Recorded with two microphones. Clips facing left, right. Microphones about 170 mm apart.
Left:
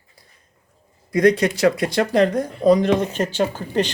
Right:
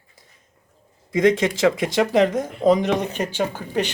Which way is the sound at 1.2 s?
90° right.